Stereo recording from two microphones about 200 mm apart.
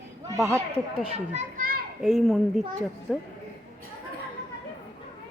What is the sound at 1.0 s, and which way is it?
Speech, 30° right (ahead or behind).